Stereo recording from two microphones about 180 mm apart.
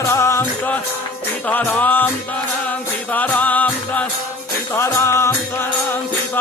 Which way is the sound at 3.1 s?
10° left (ahead or behind).